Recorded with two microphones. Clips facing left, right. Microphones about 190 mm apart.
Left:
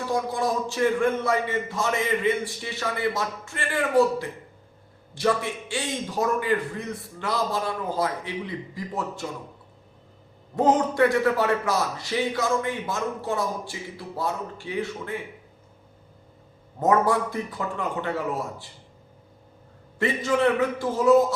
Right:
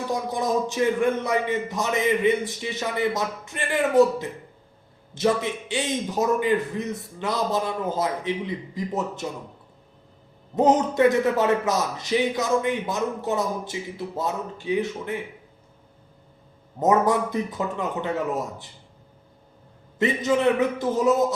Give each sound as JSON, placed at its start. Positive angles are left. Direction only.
{"t": 0.1, "sound": "a man's voice", "side_deg": -20}
{"t": 10.5, "sound": "a man's voice", "side_deg": -20}
{"t": 16.8, "sound": "a man's voice", "side_deg": -20}
{"t": 20.0, "sound": "a man's voice", "side_deg": -20}